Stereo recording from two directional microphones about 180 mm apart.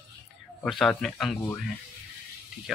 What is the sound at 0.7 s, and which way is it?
Speech, centre (ahead or behind).